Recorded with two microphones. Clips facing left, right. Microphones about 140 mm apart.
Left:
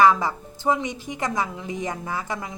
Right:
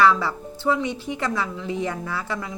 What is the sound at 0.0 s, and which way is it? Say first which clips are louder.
A woman's voice: left 1 dB; 15° left (ahead or behind).